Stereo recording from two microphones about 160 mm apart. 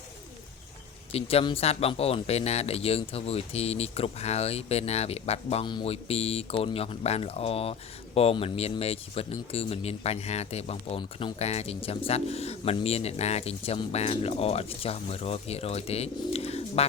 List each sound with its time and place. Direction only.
1.1 s speech: 40° left (ahead or behind)